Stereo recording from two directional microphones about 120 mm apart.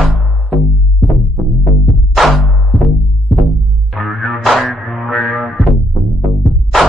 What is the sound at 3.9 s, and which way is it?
Music, centre (ahead or behind).